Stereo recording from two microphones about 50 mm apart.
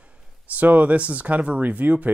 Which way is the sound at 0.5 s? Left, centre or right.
Right.